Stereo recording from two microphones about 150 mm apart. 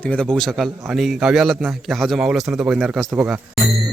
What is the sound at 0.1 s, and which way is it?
A man's voice, 5° left (ahead or behind).